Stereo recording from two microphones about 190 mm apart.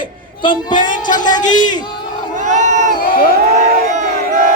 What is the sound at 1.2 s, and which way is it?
Speech, 20° left (ahead or behind).